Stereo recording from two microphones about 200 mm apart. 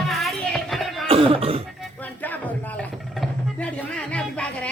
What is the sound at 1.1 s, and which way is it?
Cough, 25° right (ahead or behind).